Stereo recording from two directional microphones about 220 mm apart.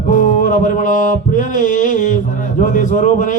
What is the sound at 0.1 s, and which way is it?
Music, 35° left (ahead or behind).